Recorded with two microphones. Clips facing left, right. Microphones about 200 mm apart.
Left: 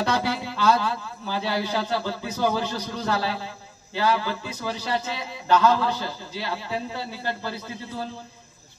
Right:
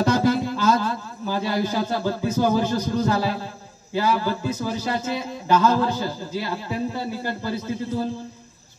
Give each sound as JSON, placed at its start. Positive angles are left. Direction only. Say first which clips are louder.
{"t": 0.0, "sound": "a man's voice", "louder": "right 6 dB", "side_deg": -45}